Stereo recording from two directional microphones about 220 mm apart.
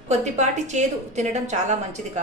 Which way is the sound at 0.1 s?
30° right (ahead or behind).